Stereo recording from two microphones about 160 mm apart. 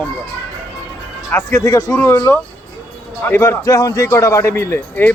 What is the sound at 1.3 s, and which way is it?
A man's voice, 20° left (ahead or behind).